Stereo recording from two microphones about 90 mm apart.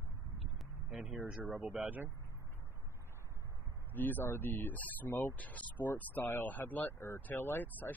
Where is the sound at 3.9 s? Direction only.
20° left (ahead or behind).